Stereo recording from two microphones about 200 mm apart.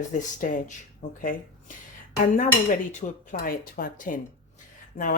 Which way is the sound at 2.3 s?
40° left (ahead or behind).